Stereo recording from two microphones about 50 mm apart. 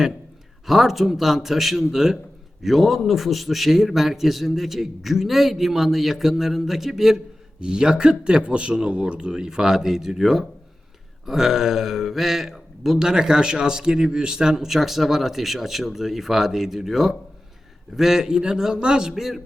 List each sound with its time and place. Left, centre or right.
0.7 s speech: centre
7.6 s speech: centre